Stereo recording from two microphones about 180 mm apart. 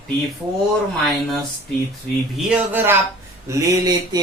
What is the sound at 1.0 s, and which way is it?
Speech, centre (ahead or behind).